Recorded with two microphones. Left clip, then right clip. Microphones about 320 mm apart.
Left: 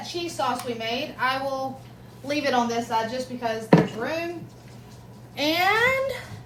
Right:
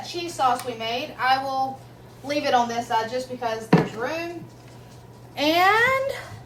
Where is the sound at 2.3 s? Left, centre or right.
Centre.